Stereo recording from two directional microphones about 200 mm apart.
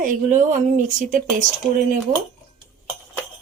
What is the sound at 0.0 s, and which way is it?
Speech, 40° right (ahead or behind).